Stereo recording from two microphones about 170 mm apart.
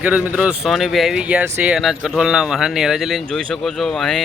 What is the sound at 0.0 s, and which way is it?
Speech, 10° right (ahead or behind).